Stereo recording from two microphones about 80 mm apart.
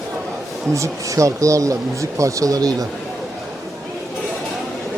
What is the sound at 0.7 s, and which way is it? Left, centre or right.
Speech, right.